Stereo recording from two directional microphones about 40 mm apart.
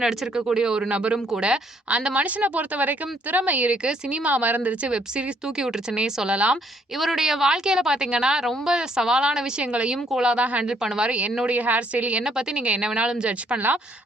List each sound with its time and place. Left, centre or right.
0.3 s a woman's voice: centre
0.8 s a woman's voice: right
2.1 s speech: right
3.8 s a woman's voice: right
4.3 s a woman's voice: right
4.8 s a woman's voice: right
7.0 s speech: centre
10.3 s speech: right
10.7 s a woman's voice: right
11.4 s a woman's voice: right